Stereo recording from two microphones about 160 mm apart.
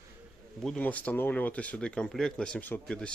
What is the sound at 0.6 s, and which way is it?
Speech, 5° left (ahead or behind).